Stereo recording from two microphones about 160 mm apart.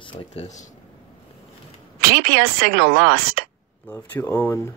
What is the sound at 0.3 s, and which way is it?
Speech, 45° left (ahead or behind).